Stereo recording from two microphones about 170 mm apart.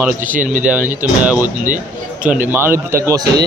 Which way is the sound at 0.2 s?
50° right (ahead or behind).